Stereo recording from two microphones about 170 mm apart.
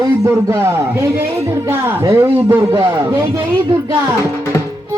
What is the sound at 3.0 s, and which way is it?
Speech, 25° right (ahead or behind).